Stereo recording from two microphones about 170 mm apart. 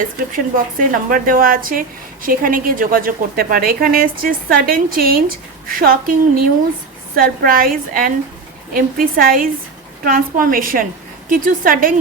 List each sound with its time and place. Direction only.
0.3 s a woman's voice: 55° right (ahead or behind)